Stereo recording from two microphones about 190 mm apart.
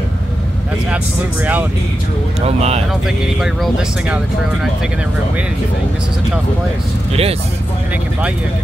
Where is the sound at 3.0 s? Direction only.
Centre (ahead or behind).